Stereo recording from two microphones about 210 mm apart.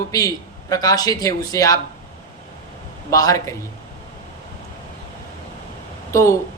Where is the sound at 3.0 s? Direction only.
15° left (ahead or behind).